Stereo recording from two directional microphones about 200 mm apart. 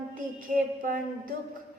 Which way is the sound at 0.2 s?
45° right (ahead or behind).